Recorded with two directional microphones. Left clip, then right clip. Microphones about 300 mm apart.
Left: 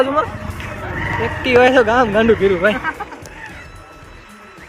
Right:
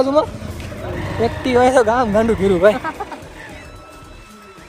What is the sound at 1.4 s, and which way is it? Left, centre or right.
Speech, right.